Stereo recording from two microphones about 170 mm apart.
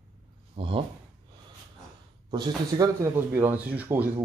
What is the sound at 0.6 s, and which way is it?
Speech, 30° right (ahead or behind).